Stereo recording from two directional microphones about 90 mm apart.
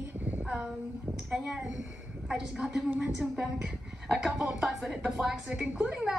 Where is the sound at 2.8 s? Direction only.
15° right (ahead or behind).